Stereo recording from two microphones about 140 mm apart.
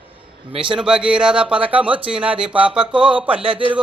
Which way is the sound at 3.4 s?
40° right (ahead or behind).